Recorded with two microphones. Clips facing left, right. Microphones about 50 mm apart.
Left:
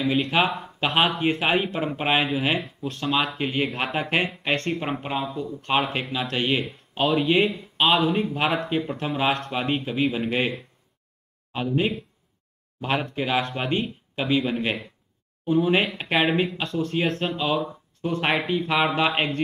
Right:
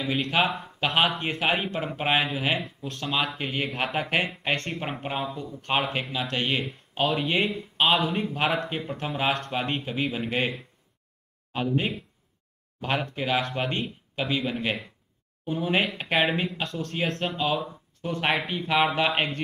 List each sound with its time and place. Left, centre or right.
0.0 s speech: centre